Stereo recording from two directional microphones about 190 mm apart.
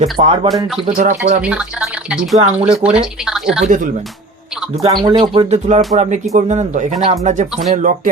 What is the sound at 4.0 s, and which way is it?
Music, centre (ahead or behind).